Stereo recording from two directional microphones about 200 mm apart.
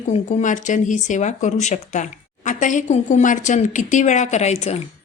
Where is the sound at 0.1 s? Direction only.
35° left (ahead or behind).